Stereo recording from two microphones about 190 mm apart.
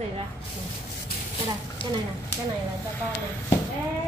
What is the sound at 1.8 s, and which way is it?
Speech, 25° left (ahead or behind).